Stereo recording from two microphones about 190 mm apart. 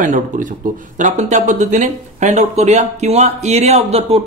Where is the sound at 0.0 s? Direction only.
40° right (ahead or behind).